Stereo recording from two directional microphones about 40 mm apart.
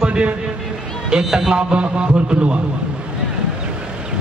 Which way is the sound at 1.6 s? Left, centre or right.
Right.